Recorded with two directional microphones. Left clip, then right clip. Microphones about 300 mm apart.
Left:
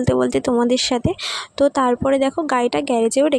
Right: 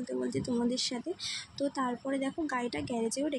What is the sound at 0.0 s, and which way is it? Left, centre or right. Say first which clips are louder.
Speech: left 17 dB; left.